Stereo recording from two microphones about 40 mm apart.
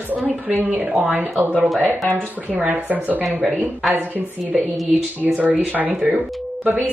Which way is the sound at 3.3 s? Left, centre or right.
Centre.